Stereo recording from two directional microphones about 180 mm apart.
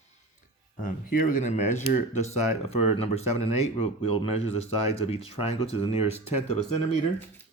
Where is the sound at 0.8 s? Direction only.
50° left (ahead or behind); by 6.1 s 35° left (ahead or behind).